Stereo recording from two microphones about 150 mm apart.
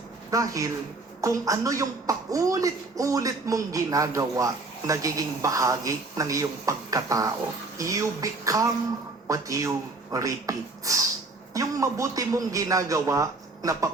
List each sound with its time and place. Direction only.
0.3 s speech: 20° right (ahead or behind)